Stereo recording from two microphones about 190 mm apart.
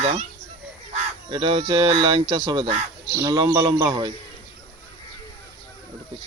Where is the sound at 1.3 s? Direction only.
25° right (ahead or behind).